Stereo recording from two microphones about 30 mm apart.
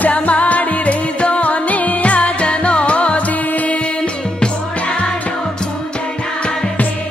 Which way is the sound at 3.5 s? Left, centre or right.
Left.